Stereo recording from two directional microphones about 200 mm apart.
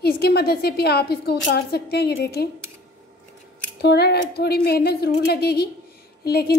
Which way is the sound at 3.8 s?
55° left (ahead or behind).